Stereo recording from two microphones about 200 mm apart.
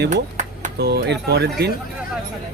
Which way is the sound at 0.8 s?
55° right (ahead or behind).